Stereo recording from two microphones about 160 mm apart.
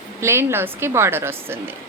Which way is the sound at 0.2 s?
15° right (ahead or behind).